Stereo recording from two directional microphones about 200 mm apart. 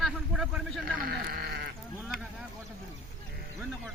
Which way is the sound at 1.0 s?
50° right (ahead or behind).